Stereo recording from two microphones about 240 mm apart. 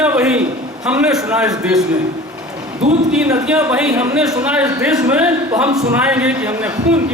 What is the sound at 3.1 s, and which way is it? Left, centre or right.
A man's voice, centre.